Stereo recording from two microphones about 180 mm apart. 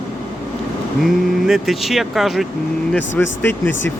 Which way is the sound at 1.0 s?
Centre (ahead or behind).